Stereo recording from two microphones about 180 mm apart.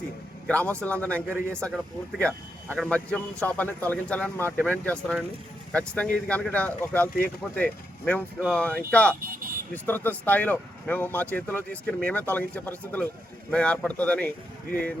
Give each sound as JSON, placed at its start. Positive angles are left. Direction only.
{"t": 0.4, "sound": "speech", "side_deg": 5}
{"t": 9.2, "sound": "speech", "side_deg": -50}
{"t": 9.7, "sound": "speech", "side_deg": 10}